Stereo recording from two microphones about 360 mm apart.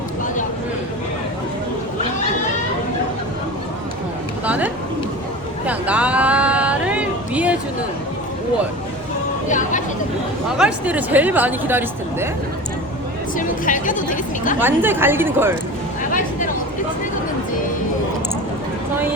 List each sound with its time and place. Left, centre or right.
4.4 s a sound: centre
9.5 s music: left
10.6 s speech: centre
13.3 s speech: left
14.6 s speech: centre